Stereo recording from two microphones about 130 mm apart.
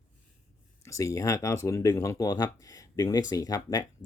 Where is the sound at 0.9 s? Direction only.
25° left (ahead or behind).